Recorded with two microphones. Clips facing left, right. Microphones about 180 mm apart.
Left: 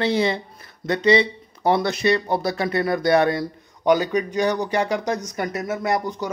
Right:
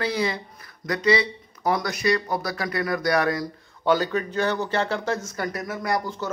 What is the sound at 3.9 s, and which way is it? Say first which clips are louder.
A man's voice: left 3 dB; 15° left (ahead or behind).